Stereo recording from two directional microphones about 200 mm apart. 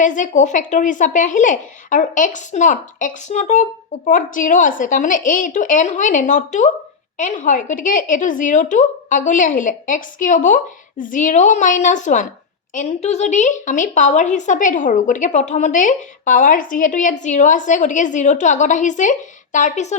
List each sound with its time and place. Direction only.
0.0 s speech: 40° left (ahead or behind)